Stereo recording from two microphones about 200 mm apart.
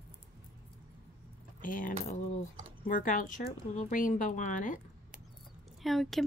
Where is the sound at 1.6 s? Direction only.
40° left (ahead or behind).